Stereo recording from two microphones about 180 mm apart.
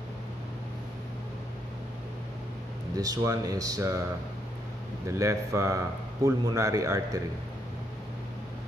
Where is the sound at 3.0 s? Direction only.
20° right (ahead or behind).